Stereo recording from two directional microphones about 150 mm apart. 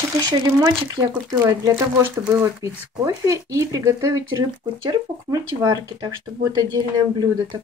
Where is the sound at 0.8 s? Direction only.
25° right (ahead or behind).